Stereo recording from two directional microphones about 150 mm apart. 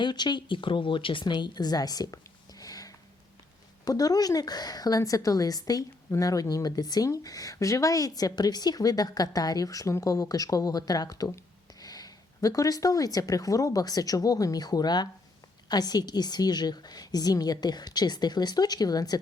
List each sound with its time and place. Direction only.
0.0 s a woman's voice: 30° left (ahead or behind)